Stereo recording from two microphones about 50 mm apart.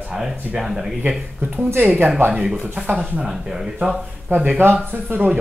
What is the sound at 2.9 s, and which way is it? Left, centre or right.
Speech, right.